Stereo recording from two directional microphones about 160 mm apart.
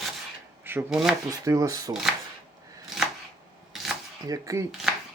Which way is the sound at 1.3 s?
20° right (ahead or behind).